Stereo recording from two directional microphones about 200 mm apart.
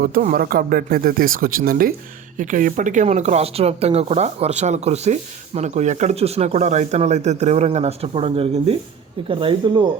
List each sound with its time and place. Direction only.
0.0 s speech: 45° right (ahead or behind); by 9.8 s 25° right (ahead or behind)